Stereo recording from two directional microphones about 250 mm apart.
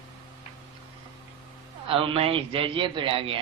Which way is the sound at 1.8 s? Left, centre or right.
Right.